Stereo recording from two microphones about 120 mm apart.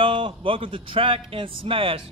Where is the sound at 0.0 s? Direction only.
45° right (ahead or behind).